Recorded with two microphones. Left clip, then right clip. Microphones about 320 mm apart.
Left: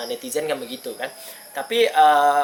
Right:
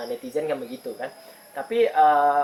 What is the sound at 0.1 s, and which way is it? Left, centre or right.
Speech, centre.